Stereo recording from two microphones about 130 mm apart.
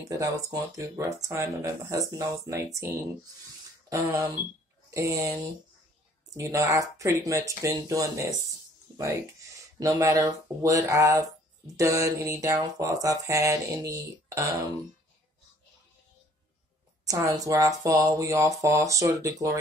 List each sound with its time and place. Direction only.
0.1 s speech: 25° right (ahead or behind)
3.9 s speech: 25° right (ahead or behind)
17.0 s speech: 25° right (ahead or behind)